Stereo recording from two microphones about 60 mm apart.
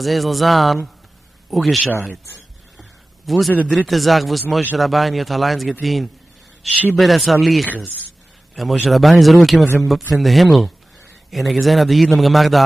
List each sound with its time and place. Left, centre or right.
0.0 s a man's voice: centre
2.8 s a sound: centre
3.7 s a man's voice: centre
7.7 s speech: right
8.8 s a man's voice: centre